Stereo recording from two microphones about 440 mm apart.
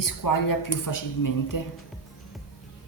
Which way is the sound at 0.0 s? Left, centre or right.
Left.